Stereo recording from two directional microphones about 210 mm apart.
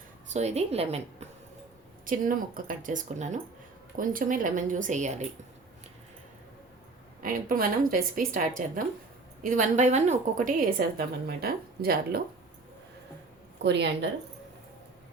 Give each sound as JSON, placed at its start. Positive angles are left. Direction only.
{"t": 0.3, "sound": "speech", "side_deg": -30}
{"t": 2.0, "sound": "speech", "side_deg": -40}
{"t": 7.2, "sound": "a woman's voice", "side_deg": -40}
{"t": 13.6, "sound": "a woman's voice", "side_deg": -55}